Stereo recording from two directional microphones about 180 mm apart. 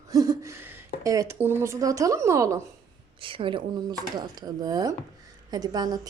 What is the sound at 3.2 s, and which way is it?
Speech, 30° right (ahead or behind).